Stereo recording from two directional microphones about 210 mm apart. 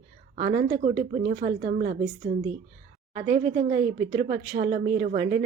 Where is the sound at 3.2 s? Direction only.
40° right (ahead or behind).